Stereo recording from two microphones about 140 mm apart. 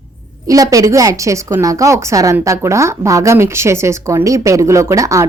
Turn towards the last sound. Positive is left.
turn(degrees=-20)  # may be behind; listen again after turning